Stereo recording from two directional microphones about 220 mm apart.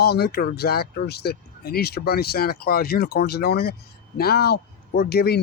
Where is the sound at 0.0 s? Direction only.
45° left (ahead or behind).